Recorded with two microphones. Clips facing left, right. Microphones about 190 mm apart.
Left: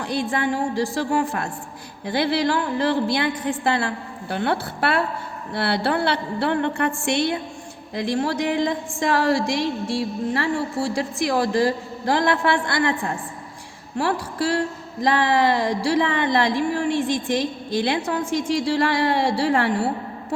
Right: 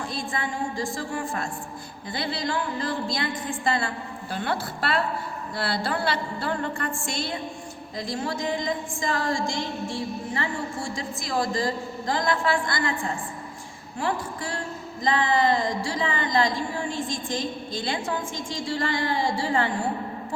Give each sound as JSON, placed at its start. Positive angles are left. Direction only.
{"t": 0.0, "sound": "a woman's voice", "side_deg": 70}
{"t": 14.0, "sound": "a woman's voice", "side_deg": 75}